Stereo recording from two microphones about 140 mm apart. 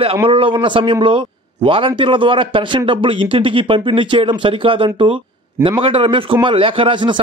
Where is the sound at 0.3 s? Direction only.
40° right (ahead or behind).